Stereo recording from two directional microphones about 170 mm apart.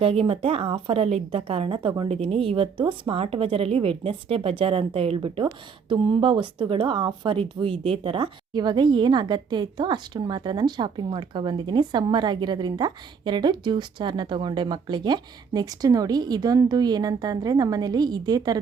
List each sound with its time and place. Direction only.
0.0 s a woman's voice: 35° right (ahead or behind)